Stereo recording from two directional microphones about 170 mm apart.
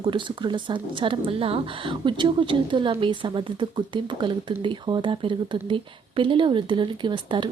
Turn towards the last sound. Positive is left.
turn(degrees=-30)  # may be behind; listen again after turning